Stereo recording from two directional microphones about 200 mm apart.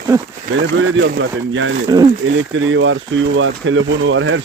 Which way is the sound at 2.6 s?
75° right (ahead or behind).